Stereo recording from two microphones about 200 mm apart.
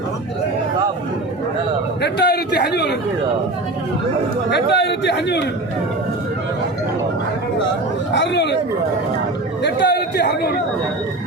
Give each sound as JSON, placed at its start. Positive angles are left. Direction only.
{"t": 2.0, "sound": "a man's voice", "side_deg": 55}
{"t": 4.7, "sound": "a man's voice", "side_deg": 60}
{"t": 8.1, "sound": "a man's voice", "side_deg": 60}
{"t": 9.6, "sound": "a man's voice", "side_deg": 55}